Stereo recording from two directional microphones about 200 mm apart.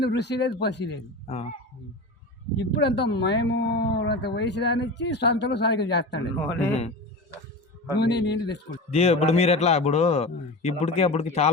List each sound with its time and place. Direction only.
0.0 s speech: 60° left (ahead or behind)
1.3 s a man's voice: 35° left (ahead or behind)
2.6 s speech: 60° left (ahead or behind)
7.9 s speech: 55° left (ahead or behind)
8.9 s a man's voice: 30° left (ahead or behind)